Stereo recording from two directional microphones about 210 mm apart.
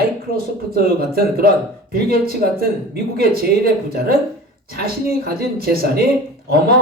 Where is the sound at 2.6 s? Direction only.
45° right (ahead or behind).